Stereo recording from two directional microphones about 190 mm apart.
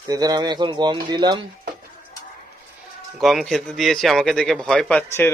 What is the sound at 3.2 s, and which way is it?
Speech, centre (ahead or behind).